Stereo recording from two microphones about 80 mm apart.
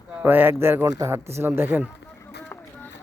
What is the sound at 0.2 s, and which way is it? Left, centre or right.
Speech, right.